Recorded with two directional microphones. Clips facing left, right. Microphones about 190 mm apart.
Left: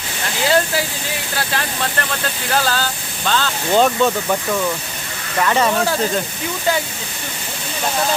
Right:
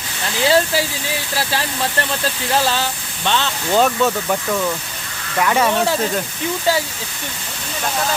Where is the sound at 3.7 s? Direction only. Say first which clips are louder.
Left 1 dB; centre (ahead or behind).